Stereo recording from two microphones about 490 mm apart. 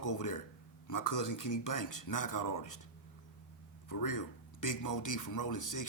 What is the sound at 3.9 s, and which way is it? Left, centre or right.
Speech, left.